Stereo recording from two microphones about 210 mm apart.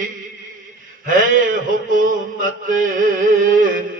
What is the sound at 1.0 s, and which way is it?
Mantra, 40° right (ahead or behind).